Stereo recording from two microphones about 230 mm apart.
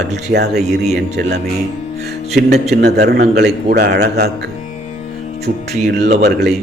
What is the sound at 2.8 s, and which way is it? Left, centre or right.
A man's voice, right.